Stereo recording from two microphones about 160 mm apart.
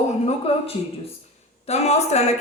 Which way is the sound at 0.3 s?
40° left (ahead or behind).